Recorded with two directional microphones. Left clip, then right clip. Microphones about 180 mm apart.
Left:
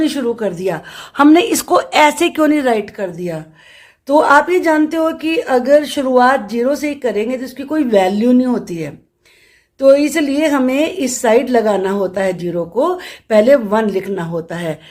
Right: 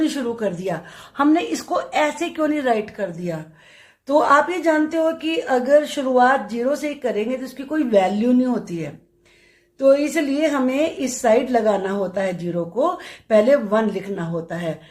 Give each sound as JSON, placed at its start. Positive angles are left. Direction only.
{"t": 0.0, "sound": "a woman's voice", "side_deg": 35}